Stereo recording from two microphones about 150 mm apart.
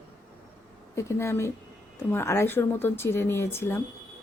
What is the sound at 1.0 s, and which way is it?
Speech, 20° left (ahead or behind).